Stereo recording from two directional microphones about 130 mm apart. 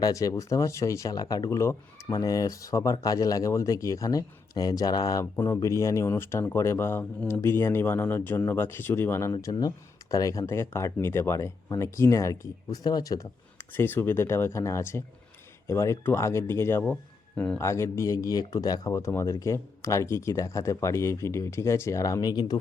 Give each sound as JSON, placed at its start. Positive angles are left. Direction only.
{"t": 0.0, "sound": "speech", "side_deg": 25}
{"t": 9.3, "sound": "speech", "side_deg": 30}
{"t": 17.6, "sound": "speech", "side_deg": 20}